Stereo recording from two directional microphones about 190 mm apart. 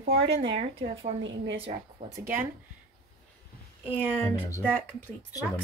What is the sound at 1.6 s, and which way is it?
Speech, 35° right (ahead or behind).